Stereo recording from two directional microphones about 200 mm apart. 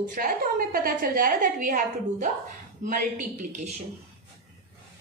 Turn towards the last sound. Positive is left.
turn(degrees=-40)  # may be behind; listen again after turning